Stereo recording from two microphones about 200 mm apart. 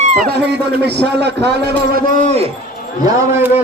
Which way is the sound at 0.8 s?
55° right (ahead or behind).